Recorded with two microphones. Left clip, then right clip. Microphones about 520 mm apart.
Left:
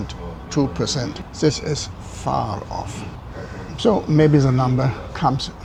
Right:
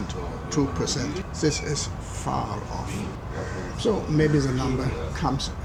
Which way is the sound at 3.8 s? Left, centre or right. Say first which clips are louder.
Left 7 dB; left.